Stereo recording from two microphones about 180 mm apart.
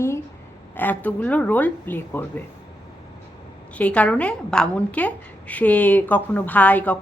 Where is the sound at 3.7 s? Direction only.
5° left (ahead or behind).